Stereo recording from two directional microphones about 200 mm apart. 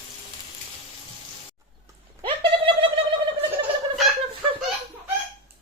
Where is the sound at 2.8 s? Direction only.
25° right (ahead or behind).